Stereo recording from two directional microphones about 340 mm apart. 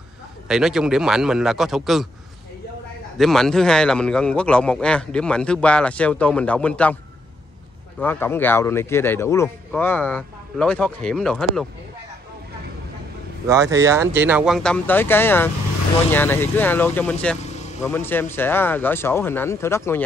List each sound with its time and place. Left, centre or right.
0.5 s a man's voice: centre
3.2 s a man's voice: centre
8.0 s a man's voice: centre
13.5 s a man's voice: centre
17.5 s vehicle: centre
17.8 s speech: centre